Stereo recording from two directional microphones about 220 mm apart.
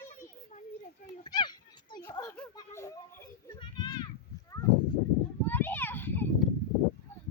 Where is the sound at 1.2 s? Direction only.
20° left (ahead or behind).